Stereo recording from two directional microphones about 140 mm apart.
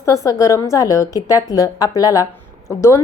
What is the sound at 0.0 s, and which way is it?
A woman's voice, 20° left (ahead or behind).